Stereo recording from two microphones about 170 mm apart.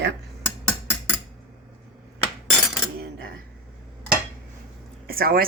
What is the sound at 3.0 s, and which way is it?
Cutlery, 70° right (ahead or behind).